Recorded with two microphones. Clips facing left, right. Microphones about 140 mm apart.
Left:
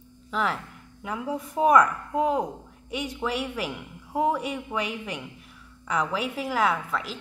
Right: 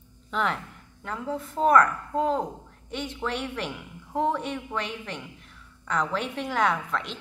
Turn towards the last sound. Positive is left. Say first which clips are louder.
# even
turn(degrees=5)  # may be behind; listen again after turning